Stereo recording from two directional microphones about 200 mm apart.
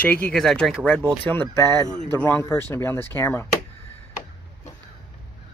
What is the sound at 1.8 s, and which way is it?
Speech, 40° left (ahead or behind).